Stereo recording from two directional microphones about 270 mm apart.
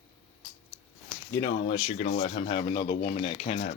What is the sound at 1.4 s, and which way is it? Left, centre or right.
Speech, left.